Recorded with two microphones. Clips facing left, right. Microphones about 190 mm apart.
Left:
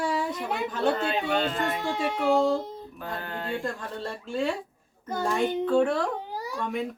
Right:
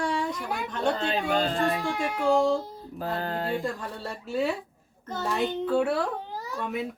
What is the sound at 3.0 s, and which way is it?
Mantra, 35° right (ahead or behind).